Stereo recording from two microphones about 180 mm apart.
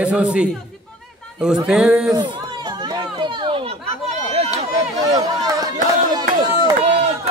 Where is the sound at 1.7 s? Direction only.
Centre (ahead or behind).